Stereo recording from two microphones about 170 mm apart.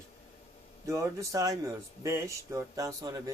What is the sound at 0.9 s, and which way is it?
Speech, 20° right (ahead or behind).